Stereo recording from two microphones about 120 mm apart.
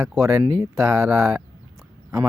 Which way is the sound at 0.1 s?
20° right (ahead or behind).